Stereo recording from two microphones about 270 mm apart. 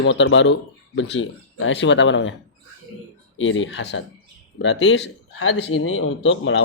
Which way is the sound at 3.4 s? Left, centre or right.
Left.